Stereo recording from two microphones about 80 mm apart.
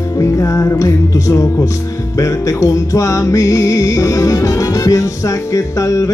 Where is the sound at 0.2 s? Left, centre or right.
Left.